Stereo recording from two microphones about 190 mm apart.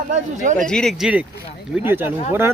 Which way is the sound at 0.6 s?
5° left (ahead or behind).